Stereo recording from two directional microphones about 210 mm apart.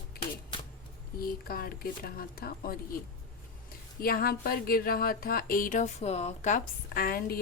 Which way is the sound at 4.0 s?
45° left (ahead or behind).